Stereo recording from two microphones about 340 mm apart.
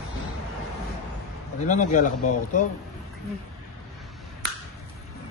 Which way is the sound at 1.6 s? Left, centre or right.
Left.